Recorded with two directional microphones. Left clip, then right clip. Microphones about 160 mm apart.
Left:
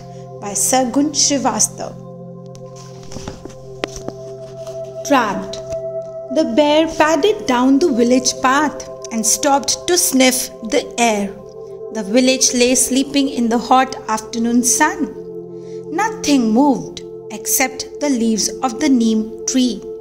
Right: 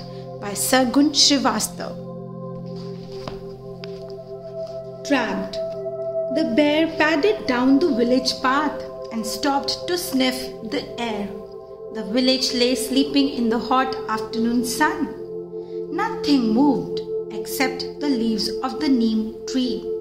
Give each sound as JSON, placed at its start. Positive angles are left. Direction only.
{"t": 0.5, "sound": "a woman's voice", "side_deg": 5}
{"t": 5.0, "sound": "a woman's voice", "side_deg": 25}
{"t": 7.1, "sound": "a woman's voice", "side_deg": 35}
{"t": 7.4, "sound": "a woman's voice", "side_deg": 50}
{"t": 11.9, "sound": "a woman's voice", "side_deg": 60}